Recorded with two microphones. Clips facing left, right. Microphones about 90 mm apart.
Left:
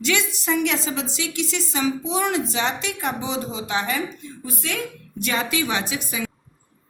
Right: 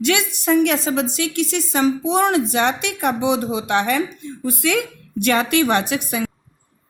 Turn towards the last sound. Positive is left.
turn(degrees=-60)  # may be behind; listen again after turning